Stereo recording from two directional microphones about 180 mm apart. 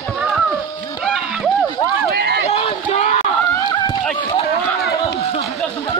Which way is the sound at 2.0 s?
60° right (ahead or behind).